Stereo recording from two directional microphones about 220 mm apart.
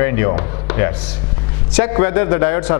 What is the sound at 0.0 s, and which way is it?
A man's voice, 15° left (ahead or behind).